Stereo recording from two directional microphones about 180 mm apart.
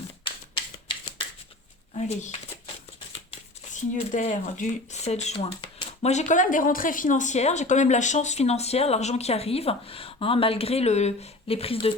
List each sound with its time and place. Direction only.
0.5 s a sound: 30° left (ahead or behind)
2.0 s speech: 40° left (ahead or behind)
3.7 s speech: 40° left (ahead or behind)